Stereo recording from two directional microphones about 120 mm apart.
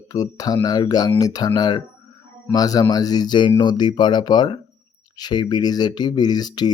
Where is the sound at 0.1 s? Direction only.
30° left (ahead or behind).